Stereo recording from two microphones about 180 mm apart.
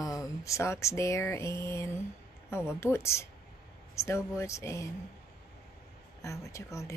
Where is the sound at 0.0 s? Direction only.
20° left (ahead or behind).